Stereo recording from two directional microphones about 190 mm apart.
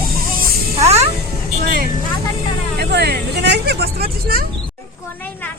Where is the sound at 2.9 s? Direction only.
60° right (ahead or behind).